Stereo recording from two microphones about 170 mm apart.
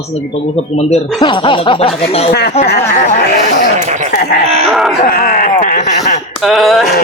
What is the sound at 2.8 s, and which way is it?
Speech, 45° left (ahead or behind).